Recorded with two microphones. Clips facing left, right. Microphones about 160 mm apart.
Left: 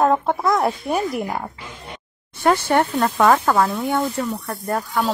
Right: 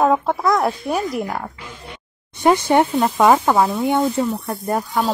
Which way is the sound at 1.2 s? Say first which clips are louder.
Even; 10° left (ahead or behind).